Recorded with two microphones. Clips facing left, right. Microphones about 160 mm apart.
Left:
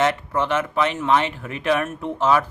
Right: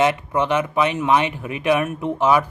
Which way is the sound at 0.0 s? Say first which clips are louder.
Right 2 dB; 15° right (ahead or behind).